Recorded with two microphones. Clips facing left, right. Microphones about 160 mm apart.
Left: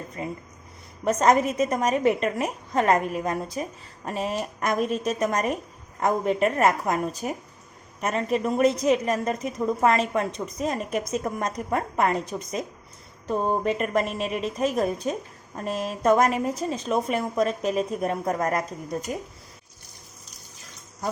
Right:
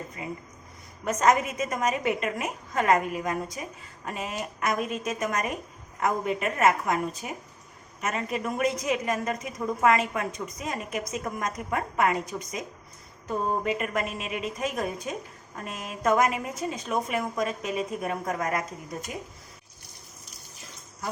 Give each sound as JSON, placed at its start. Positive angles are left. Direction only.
{"t": 0.2, "sound": "a woman's voice", "side_deg": 40}